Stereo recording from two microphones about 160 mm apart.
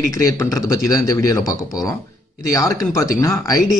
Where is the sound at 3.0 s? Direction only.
20° left (ahead or behind).